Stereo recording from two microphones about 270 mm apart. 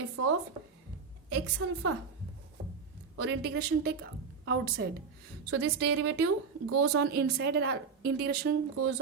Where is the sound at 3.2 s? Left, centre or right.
Right.